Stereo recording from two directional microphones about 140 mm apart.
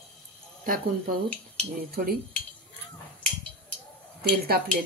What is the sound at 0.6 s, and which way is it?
Speech, 85° right.